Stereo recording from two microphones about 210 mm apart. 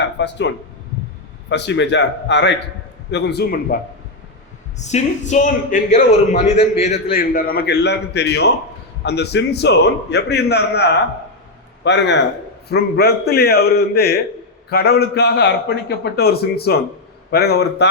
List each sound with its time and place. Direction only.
0.2 s a man's voice: 55° left (ahead or behind)
4.8 s a man's voice: 35° left (ahead or behind)
7.1 s a man's voice: 45° left (ahead or behind)